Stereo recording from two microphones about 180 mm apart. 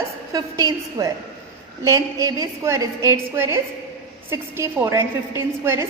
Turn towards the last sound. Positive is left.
turn(degrees=-15)  # may be behind; listen again after turning